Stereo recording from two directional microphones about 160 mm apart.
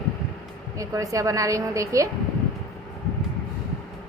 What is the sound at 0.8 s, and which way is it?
A woman's voice, 20° right (ahead or behind).